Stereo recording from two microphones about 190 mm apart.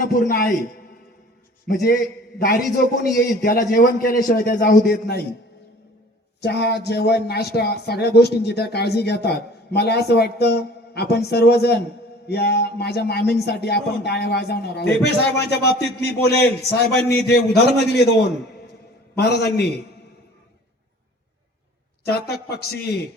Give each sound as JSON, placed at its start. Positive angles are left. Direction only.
{"t": 0.0, "sound": "a man's voice", "side_deg": 50}
{"t": 1.6, "sound": "a man's voice", "side_deg": 55}
{"t": 6.4, "sound": "speech", "side_deg": 60}
{"t": 19.1, "sound": "speech", "side_deg": 55}
{"t": 22.0, "sound": "speech", "side_deg": 55}